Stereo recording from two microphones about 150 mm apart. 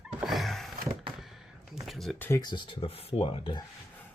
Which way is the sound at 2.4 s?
30° left (ahead or behind).